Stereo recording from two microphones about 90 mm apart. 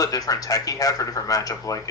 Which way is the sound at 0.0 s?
45° left (ahead or behind).